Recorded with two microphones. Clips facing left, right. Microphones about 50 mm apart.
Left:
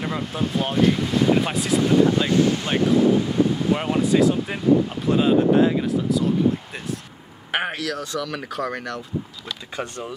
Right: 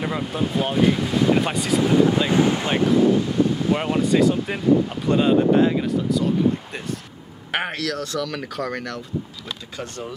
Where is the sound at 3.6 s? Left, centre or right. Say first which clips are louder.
Even; centre.